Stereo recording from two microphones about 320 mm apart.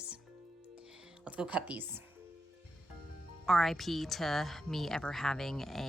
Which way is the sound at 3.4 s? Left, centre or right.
Centre.